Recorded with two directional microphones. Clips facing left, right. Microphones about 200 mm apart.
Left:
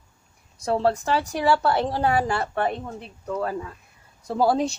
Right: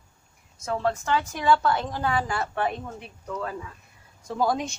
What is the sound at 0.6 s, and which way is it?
A woman's voice, 35° left (ahead or behind).